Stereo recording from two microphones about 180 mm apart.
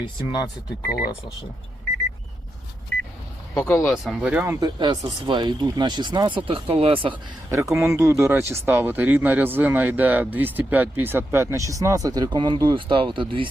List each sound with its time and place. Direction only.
0.0 s speech: 25° left (ahead or behind)
3.5 s speech: 10° left (ahead or behind)
3.9 s speech: centre (ahead or behind)
4.6 s speech: 20° right (ahead or behind)
7.7 s speech: 15° right (ahead or behind)